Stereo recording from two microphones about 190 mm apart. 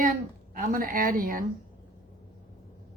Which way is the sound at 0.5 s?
50° right (ahead or behind).